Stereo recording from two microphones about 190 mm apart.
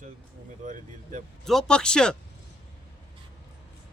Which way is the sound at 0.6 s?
40° right (ahead or behind).